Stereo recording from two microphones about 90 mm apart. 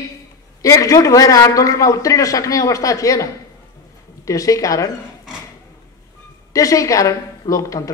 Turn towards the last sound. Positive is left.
turn(degrees=40)  # may be behind; listen again after turning